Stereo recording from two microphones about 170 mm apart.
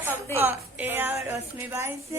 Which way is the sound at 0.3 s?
10° right (ahead or behind).